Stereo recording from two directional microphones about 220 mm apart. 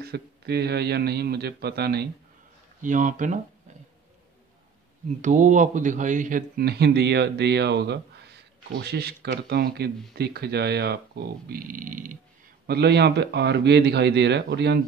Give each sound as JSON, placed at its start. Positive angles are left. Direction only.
{"t": 0.0, "sound": "a man's voice", "side_deg": -50}
{"t": 2.8, "sound": "speech", "side_deg": -35}
{"t": 5.2, "sound": "a man's voice", "side_deg": -35}
{"t": 12.6, "sound": "a man's voice", "side_deg": -50}